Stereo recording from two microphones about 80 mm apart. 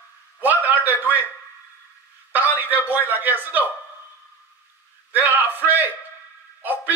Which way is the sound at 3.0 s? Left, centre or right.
Right.